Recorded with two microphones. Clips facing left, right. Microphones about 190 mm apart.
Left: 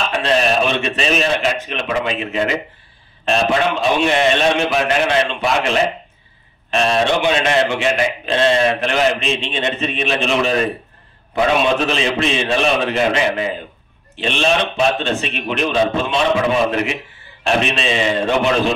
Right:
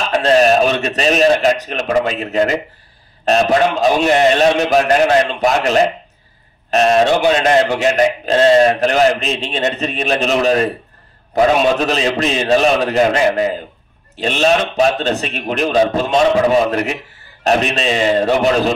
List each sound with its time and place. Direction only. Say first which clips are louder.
0.1 s a man's voice: right 7 dB; 40° right (ahead or behind)